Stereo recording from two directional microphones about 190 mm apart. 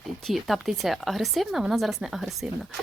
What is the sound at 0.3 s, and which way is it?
Speech, centre (ahead or behind).